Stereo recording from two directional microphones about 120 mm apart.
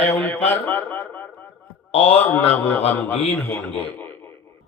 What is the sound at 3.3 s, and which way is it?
A man's voice, 15° left (ahead or behind).